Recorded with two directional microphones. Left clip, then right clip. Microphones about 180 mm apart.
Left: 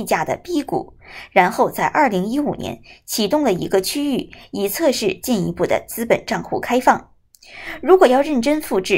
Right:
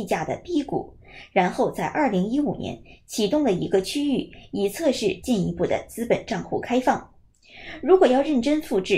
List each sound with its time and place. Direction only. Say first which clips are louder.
0.0 s a woman's voice: left 6 dB; 15° left (ahead or behind)